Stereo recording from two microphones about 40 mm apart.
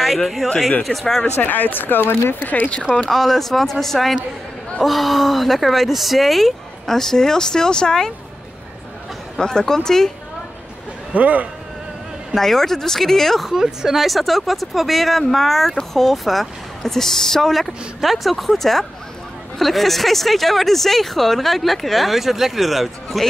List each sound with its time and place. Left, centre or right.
0.0 s speech: centre
1.4 s speech: left
2.4 s speech: left
3.1 s speech: centre
9.4 s speech: centre
11.1 s speech: right
12.4 s speech: centre
13.5 s speech: centre